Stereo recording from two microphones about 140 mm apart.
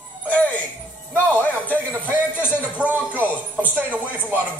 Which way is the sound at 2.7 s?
10° right (ahead or behind).